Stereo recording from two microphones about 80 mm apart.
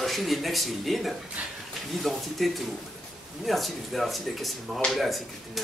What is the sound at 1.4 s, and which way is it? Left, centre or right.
Speech, centre.